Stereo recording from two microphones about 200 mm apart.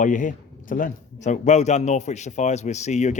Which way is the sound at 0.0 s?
40° left (ahead or behind).